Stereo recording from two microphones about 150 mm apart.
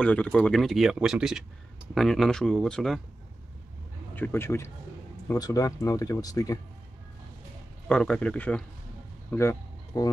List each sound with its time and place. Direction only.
0.0 s speech: 10° left (ahead or behind)
4.1 s speech: 15° left (ahead or behind)
7.9 s speech: 5° left (ahead or behind)